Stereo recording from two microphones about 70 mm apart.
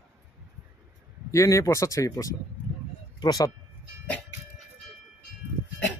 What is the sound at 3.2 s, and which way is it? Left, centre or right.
Speech, left.